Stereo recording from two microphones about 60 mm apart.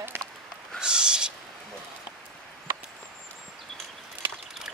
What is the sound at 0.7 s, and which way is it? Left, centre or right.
Owl, centre.